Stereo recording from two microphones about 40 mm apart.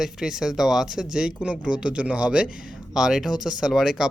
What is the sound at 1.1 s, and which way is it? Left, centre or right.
Speech, right.